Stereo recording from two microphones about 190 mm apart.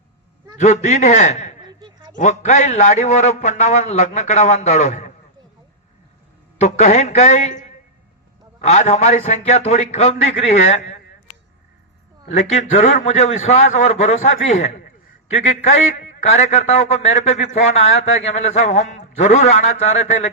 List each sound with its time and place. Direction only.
0.6 s a man's voice: 35° left (ahead or behind)
6.6 s a man's voice: 35° left (ahead or behind)
8.6 s a man's voice: 35° left (ahead or behind)
12.4 s a man's voice: 35° left (ahead or behind)